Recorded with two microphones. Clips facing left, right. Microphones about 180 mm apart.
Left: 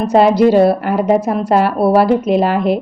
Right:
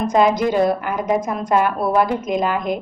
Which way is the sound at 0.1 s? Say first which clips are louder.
Left 8 dB; 35° left (ahead or behind).